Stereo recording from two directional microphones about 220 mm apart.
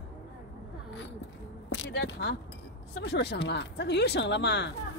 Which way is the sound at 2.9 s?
50° left (ahead or behind).